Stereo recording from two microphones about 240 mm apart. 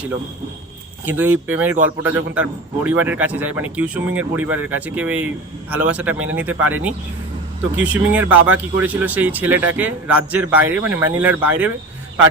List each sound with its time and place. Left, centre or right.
1.0 s speech: centre